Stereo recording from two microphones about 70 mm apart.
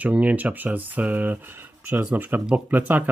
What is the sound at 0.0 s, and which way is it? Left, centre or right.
Speech, right.